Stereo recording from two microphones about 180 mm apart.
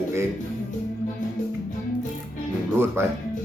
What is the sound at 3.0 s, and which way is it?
Speech, 15° right (ahead or behind).